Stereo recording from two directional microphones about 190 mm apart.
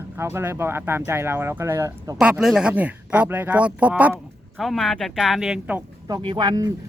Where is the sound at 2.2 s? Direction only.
5° right (ahead or behind).